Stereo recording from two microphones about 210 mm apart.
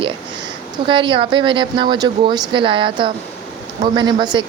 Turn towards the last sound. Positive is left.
turn(degrees=-20)  # may be behind; listen again after turning